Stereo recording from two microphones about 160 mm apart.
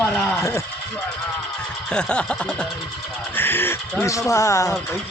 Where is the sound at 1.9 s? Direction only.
5° left (ahead or behind).